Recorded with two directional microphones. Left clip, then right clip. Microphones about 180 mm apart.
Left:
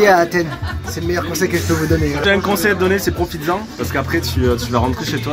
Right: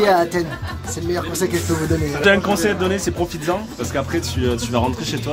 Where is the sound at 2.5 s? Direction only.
10° right (ahead or behind).